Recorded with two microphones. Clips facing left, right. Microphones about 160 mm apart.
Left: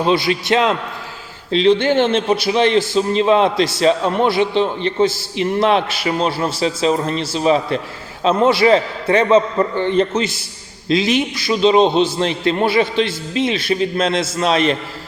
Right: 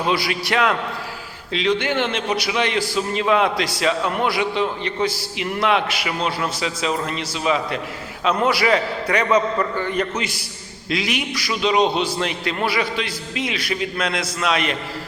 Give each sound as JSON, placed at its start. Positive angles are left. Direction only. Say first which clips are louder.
{"t": 0.0, "sound": "a man's voice", "louder": "left 5 dB", "side_deg": 25}